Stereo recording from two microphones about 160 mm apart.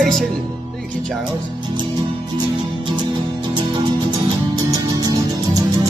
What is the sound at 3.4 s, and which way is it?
Music, 30° right (ahead or behind).